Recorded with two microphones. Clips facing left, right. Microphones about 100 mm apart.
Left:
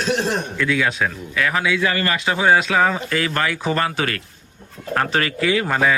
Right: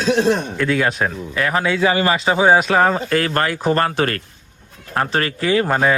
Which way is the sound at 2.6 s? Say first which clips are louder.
Right 3 dB; 45° right (ahead or behind).